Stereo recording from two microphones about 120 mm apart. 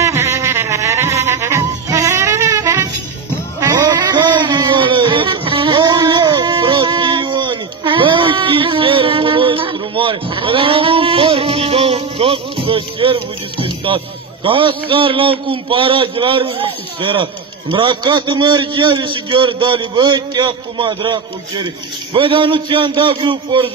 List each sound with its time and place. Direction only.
0.0 s music: 20° right (ahead or behind)
3.6 s a sound: 30° right (ahead or behind)
22.1 s a man's voice: 45° right (ahead or behind)